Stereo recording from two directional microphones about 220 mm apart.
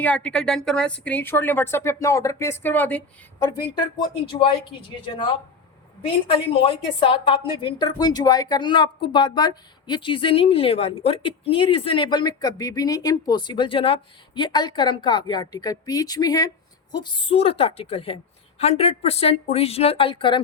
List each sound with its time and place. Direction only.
0.0 s a woman's voice: 5° left (ahead or behind)
4.3 s a woman's voice: 20° left (ahead or behind)
6.0 s a woman's voice: 25° left (ahead or behind)